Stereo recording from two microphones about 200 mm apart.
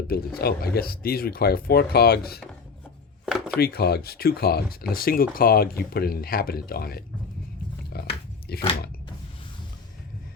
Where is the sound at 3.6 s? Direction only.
50° left (ahead or behind).